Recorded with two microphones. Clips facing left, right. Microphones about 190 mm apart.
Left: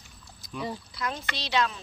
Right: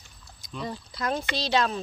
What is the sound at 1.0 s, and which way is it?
Speech, 40° right (ahead or behind).